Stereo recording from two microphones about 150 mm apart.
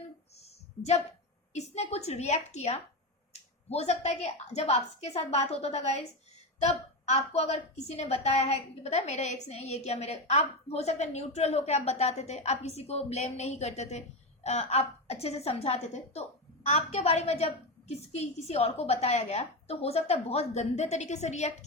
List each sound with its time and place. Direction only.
1.5 s a woman's voice: 45° left (ahead or behind)